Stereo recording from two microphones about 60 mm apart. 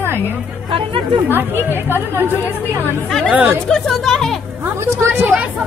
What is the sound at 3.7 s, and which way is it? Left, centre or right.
Speech, centre.